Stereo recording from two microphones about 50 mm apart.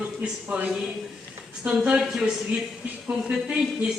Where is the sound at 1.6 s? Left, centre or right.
Centre.